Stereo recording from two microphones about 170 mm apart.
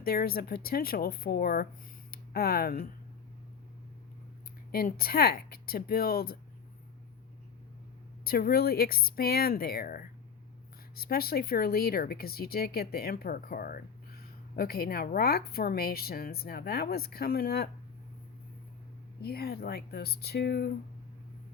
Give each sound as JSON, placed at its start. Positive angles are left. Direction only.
{"t": 0.0, "sound": "speech", "side_deg": 60}
{"t": 2.0, "sound": "a sound", "side_deg": 65}
{"t": 4.7, "sound": "speech", "side_deg": 60}
{"t": 8.2, "sound": "speech", "side_deg": 60}
{"t": 19.2, "sound": "speech", "side_deg": 65}